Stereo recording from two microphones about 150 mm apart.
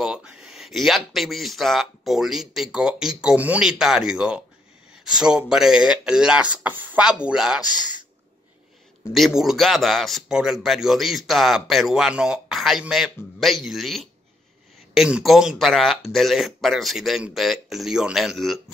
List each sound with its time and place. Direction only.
0.0 s speech: 5° right (ahead or behind)
9.1 s speech: centre (ahead or behind)